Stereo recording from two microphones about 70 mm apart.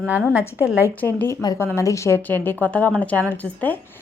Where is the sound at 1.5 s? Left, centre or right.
Left.